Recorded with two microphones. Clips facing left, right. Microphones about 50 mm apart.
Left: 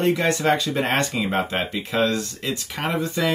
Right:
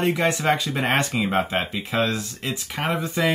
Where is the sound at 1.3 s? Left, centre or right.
Centre.